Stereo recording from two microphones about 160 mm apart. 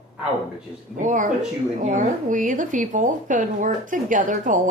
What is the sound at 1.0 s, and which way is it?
A woman's voice, 55° right (ahead or behind).